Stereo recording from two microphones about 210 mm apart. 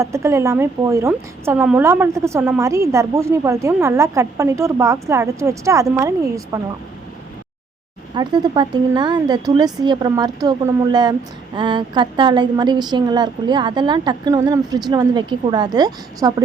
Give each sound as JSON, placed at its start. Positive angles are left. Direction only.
{"t": 0.0, "sound": "a woman's voice", "side_deg": -15}
{"t": 8.1, "sound": "a woman's voice", "side_deg": -20}